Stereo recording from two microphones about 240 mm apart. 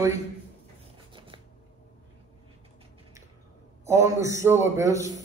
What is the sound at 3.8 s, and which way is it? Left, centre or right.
Speech, centre.